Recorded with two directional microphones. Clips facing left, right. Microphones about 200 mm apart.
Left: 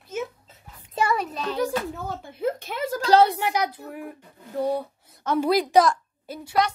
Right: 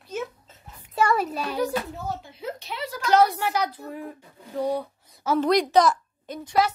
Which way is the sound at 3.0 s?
30° left (ahead or behind).